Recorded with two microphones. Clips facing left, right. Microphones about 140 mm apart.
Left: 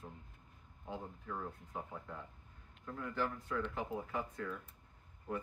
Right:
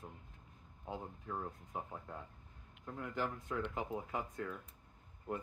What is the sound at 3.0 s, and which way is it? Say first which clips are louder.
Speech: left 1 dB; 20° right (ahead or behind).